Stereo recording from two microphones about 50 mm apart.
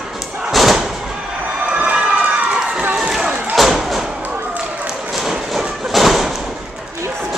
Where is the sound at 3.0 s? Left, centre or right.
Centre.